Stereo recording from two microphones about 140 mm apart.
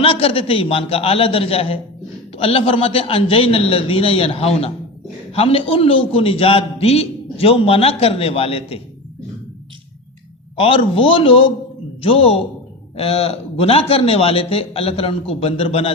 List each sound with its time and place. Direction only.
0.0 s a man's voice: 40° left (ahead or behind)
10.6 s a man's voice: 40° left (ahead or behind)